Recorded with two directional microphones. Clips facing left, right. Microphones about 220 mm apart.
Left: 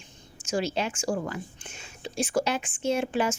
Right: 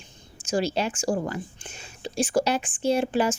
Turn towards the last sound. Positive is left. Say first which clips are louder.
# right 3 dB
turn(degrees=-35)  # may be behind; listen again after turning